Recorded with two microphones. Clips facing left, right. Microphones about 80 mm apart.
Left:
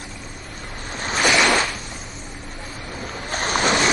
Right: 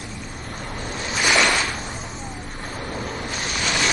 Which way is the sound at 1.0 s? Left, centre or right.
Left.